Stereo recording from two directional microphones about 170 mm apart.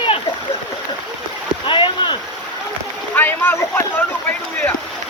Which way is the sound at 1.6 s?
30° left (ahead or behind).